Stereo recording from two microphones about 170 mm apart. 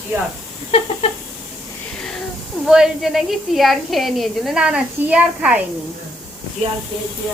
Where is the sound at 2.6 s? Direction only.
5° right (ahead or behind).